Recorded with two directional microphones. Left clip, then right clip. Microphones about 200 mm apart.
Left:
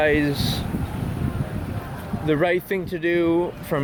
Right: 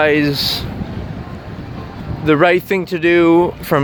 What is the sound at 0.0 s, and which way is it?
Speech, 35° right (ahead or behind).